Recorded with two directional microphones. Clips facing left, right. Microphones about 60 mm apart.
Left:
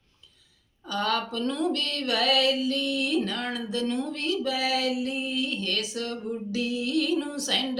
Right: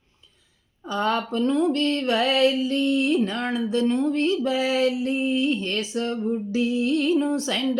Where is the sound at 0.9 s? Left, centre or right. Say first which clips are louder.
Right 4 dB; right.